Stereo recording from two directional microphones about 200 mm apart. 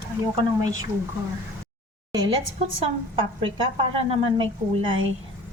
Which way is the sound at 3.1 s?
25° right (ahead or behind).